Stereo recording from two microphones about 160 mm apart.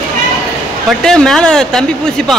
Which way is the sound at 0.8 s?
5° left (ahead or behind).